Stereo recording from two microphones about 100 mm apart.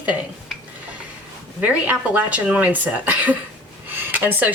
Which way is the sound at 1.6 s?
15° right (ahead or behind).